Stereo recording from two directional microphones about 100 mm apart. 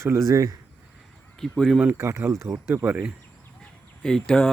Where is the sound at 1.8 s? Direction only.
25° right (ahead or behind).